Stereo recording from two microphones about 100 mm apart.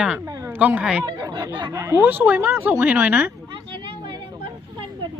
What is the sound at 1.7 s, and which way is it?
Speech, 30° right (ahead or behind).